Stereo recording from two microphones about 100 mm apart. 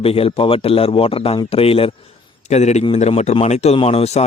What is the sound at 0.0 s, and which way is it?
Speech, 75° left (ahead or behind).